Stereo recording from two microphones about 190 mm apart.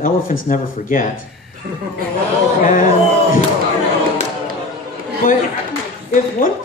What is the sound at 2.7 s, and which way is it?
Speech, 45° left (ahead or behind).